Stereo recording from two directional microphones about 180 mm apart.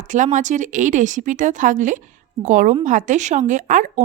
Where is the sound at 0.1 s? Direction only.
45° right (ahead or behind).